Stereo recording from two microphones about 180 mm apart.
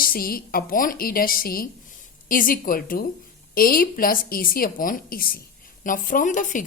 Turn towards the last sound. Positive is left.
turn(degrees=45)  # may be behind; listen again after turning